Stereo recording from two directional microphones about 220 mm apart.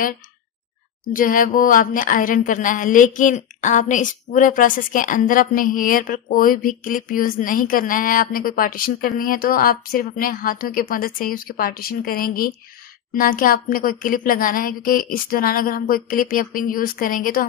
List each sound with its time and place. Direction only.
1.1 s a woman's voice: 40° left (ahead or behind)